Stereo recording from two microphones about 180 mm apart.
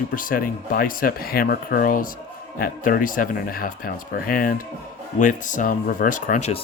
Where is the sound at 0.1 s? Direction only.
50° left (ahead or behind).